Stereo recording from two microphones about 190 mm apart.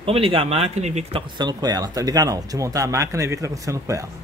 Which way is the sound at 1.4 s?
20° right (ahead or behind).